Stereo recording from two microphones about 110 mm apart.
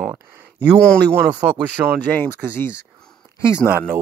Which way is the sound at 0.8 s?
10° left (ahead or behind).